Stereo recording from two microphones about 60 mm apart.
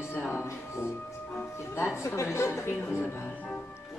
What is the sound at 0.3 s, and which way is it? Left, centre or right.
Music, left.